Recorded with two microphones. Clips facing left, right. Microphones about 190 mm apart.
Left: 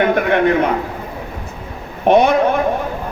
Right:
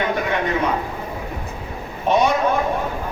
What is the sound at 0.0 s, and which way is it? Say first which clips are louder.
Speech: left 7 dB; 60° left (ahead or behind).